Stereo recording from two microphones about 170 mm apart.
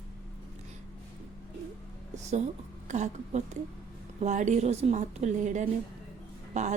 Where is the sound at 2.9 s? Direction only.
45° right (ahead or behind).